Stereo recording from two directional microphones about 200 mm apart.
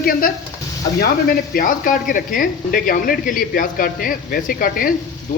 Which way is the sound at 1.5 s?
40° left (ahead or behind).